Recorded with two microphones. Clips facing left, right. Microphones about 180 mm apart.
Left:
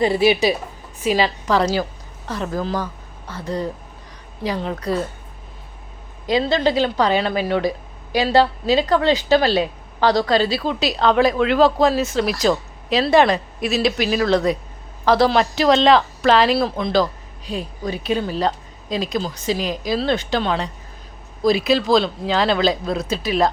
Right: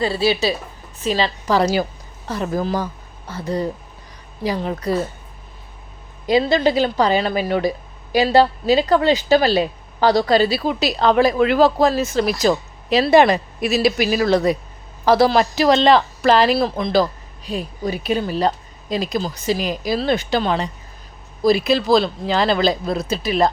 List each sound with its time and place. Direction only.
0.0 s a woman's voice: 20° left (ahead or behind)
1.5 s speech: 5° right (ahead or behind)
6.2 s speech: 10° right (ahead or behind)